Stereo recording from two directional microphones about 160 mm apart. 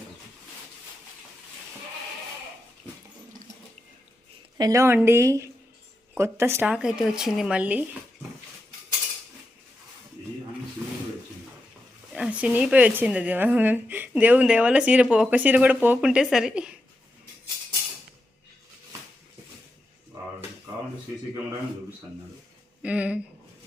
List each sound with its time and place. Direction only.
4.5 s a woman's voice: 20° right (ahead or behind)
6.7 s speech: 5° right (ahead or behind)
12.1 s a woman's voice: 5° right (ahead or behind)
22.8 s a woman's voice: 10° right (ahead or behind)